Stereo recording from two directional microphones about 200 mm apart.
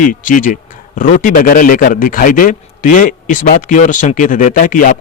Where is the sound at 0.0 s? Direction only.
40° left (ahead or behind).